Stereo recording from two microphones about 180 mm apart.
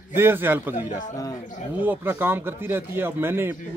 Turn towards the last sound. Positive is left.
turn(degrees=-15)  # may be behind; listen again after turning